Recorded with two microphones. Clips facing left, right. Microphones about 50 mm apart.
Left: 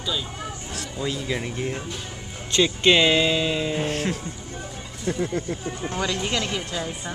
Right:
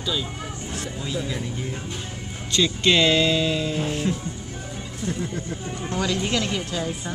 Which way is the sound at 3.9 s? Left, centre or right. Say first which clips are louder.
Right 1 dB; left.